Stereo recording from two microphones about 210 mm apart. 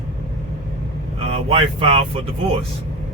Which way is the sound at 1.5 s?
25° right (ahead or behind).